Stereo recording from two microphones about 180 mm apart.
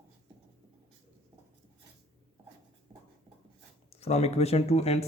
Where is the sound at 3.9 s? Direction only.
35° left (ahead or behind).